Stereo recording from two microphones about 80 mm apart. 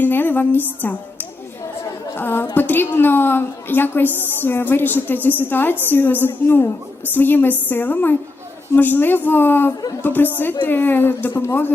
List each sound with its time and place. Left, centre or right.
0.0 s music: left
2.1 s a woman's voice: left